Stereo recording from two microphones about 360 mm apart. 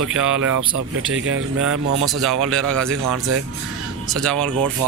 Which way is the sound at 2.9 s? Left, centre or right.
Right.